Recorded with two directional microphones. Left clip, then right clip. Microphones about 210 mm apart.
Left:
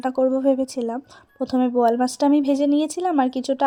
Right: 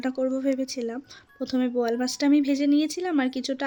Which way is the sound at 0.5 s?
20° left (ahead or behind).